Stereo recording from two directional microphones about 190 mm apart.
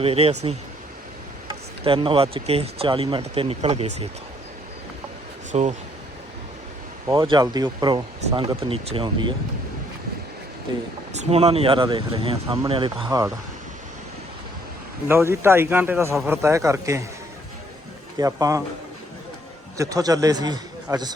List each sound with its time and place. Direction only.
0.0 s speech: 30° right (ahead or behind)
5.5 s speech: 35° right (ahead or behind)
7.1 s speech: 20° right (ahead or behind)
10.7 s speech: 25° right (ahead or behind)
13.1 s a man's voice: 15° right (ahead or behind)
15.0 s a man's voice: 10° right (ahead or behind)
18.2 s a man's voice: 20° right (ahead or behind)
19.7 s a man's voice: 20° right (ahead or behind)